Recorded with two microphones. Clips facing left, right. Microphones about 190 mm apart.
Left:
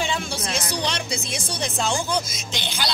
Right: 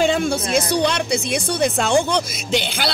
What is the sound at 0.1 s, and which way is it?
Speech, 55° right (ahead or behind).